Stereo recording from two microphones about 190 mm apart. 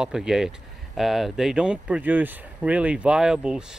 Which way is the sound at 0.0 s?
5° right (ahead or behind).